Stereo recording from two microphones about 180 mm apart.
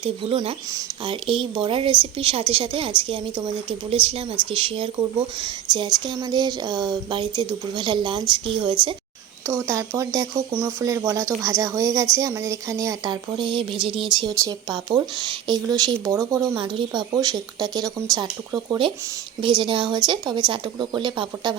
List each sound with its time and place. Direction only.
0.0 s speech: 30° right (ahead or behind)